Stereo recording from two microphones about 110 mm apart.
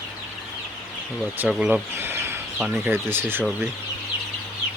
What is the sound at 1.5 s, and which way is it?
Speech, 10° right (ahead or behind).